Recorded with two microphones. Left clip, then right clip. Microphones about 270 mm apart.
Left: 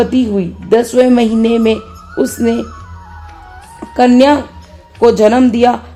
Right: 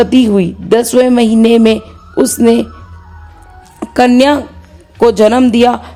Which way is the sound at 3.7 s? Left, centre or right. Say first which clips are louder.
Right 1 dB; right.